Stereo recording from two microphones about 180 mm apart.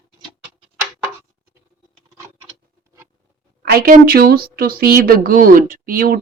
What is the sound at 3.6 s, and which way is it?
Speech, 60° right (ahead or behind).